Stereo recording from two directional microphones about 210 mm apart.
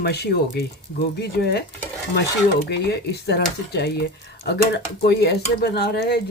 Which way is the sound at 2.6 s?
50° left (ahead or behind).